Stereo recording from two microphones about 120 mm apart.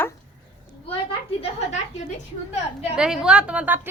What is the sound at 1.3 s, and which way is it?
Speech, 70° left (ahead or behind).